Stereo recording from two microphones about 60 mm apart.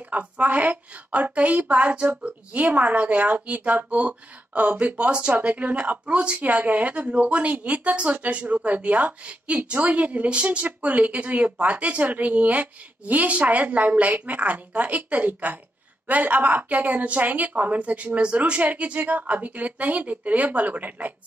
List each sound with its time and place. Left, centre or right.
0.0 s a woman's voice: right